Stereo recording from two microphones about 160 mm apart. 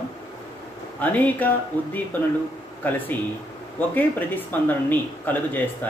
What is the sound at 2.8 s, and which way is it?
Speech, 10° left (ahead or behind).